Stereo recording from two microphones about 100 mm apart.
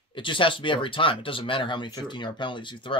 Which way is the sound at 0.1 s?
55° left (ahead or behind).